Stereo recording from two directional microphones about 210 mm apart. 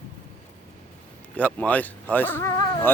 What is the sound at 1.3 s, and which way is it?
Speech, 5° left (ahead or behind).